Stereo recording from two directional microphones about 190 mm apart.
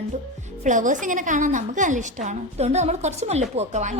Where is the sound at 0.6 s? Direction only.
40° right (ahead or behind).